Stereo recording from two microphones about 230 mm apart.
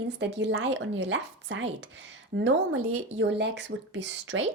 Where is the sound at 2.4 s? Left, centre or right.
Right.